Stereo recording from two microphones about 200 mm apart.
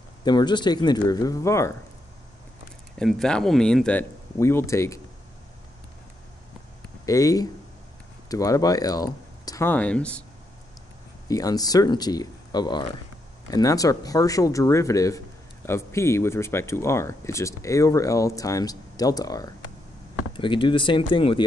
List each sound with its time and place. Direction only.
0.2 s speech: 20° left (ahead or behind)
3.0 s speech: centre (ahead or behind)
7.1 s speech: 15° left (ahead or behind)
11.2 s speech: 20° left (ahead or behind)